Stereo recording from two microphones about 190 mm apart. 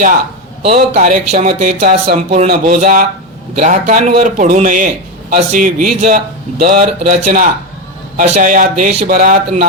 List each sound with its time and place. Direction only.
0.7 s a man's voice: 40° right (ahead or behind)